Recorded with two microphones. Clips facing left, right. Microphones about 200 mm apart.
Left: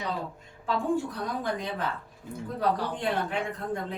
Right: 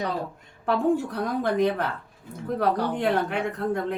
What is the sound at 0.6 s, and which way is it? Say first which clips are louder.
Speech: right 5 dB; 65° right (ahead or behind).